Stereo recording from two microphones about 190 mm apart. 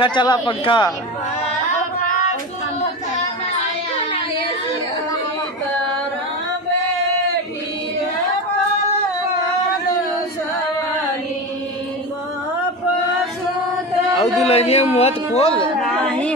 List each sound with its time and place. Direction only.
0.0 s a man's voice: 25° left (ahead or behind)
14.4 s speech: 35° left (ahead or behind)
15.9 s a sound: 5° left (ahead or behind)